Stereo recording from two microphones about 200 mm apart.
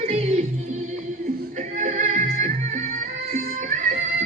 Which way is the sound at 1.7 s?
35° right (ahead or behind).